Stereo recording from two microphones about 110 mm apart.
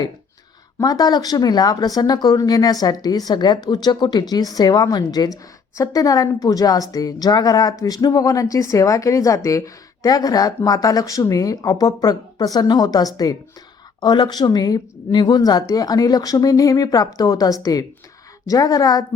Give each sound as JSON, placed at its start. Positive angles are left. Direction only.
{"t": 0.8, "sound": "speech", "side_deg": 35}